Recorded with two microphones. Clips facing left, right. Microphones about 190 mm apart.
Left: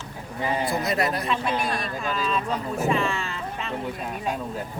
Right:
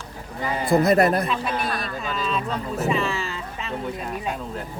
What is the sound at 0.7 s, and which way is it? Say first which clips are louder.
Speech: right 8 dB; 50° right (ahead or behind).